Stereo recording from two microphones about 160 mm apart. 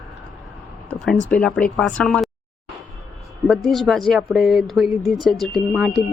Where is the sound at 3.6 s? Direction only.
Centre (ahead or behind).